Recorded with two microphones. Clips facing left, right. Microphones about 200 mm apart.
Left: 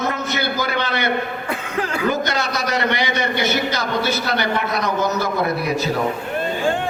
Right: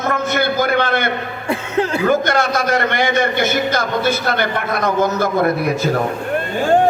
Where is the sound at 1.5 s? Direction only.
25° right (ahead or behind).